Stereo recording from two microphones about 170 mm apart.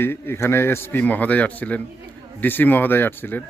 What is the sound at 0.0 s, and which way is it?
A man's voice, 15° left (ahead or behind).